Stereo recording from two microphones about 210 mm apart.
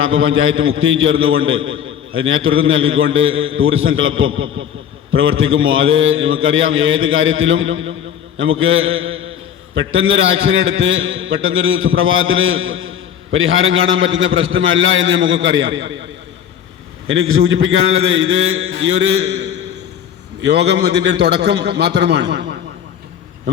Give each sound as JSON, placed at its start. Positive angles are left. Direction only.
{"t": 0.0, "sound": "a man's voice", "side_deg": -70}
{"t": 17.9, "sound": "a man's voice", "side_deg": -50}